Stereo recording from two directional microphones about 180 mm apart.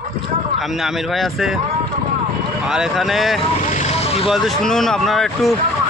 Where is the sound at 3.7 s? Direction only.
35° left (ahead or behind).